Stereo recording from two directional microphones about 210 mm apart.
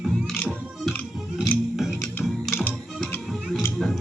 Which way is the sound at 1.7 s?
Centre (ahead or behind).